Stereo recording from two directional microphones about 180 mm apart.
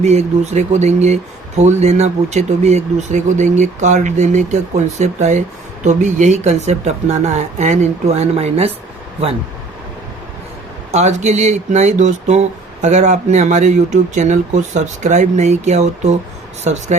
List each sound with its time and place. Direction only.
0.0 s speech: 40° right (ahead or behind)
10.9 s speech: 40° right (ahead or behind)